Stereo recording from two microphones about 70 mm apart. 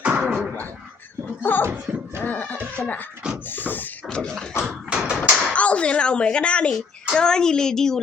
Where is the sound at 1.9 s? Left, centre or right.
Centre.